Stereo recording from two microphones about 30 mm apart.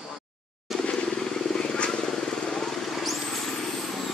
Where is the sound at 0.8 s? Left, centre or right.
Left.